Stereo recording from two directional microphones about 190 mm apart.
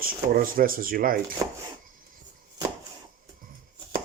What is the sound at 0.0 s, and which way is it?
Speech, 50° right (ahead or behind).